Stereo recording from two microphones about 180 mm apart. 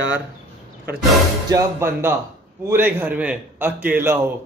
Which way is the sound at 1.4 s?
15° right (ahead or behind).